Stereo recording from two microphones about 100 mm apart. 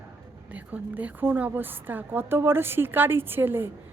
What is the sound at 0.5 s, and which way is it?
A woman's voice, 15° right (ahead or behind).